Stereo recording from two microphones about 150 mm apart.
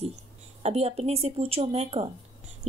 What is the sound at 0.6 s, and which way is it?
Speech, 45° right (ahead or behind).